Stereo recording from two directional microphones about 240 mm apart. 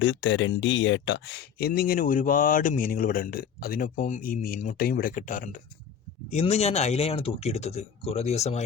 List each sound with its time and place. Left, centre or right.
0.0 s speech: left